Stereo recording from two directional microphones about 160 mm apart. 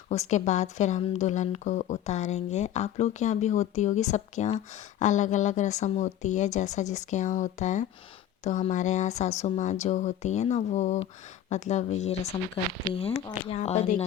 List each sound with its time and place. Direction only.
0.1 s speech: 45° left (ahead or behind)